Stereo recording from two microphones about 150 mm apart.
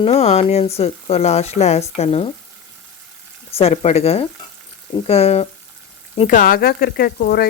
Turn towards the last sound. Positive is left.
turn(degrees=90)